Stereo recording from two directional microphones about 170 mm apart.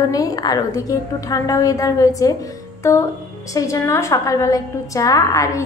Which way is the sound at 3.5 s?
20° left (ahead or behind).